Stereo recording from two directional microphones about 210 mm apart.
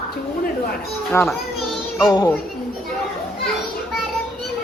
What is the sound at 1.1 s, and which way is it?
Speech, 10° left (ahead or behind).